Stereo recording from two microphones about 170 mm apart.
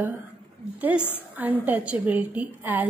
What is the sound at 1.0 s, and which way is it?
Speech, 10° left (ahead or behind).